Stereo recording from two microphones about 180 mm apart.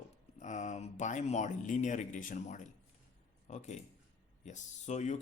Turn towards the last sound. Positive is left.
turn(degrees=40)  # may be behind; listen again after turning